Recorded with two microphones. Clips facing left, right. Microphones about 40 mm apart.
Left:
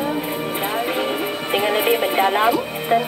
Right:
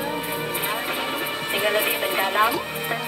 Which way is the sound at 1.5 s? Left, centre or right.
Centre.